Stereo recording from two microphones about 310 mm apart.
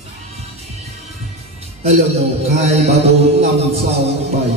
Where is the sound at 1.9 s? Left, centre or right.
Centre.